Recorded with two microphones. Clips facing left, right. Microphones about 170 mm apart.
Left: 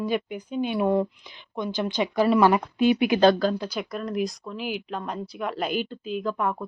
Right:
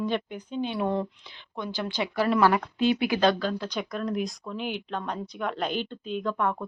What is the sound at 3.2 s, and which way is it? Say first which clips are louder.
Speech: left 6 dB; 35° left (ahead or behind).